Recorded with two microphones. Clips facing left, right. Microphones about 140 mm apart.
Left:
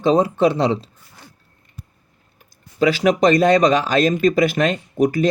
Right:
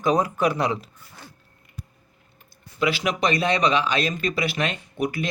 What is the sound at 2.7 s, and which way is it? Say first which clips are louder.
Speech: left 8 dB; 40° left (ahead or behind).